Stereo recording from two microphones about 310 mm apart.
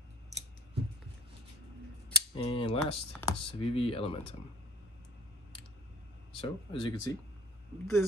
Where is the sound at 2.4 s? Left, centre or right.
Centre.